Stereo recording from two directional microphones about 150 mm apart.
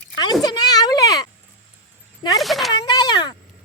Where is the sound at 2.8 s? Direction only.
30° left (ahead or behind).